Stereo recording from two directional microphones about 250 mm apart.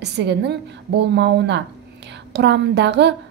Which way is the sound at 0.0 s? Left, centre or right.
Right.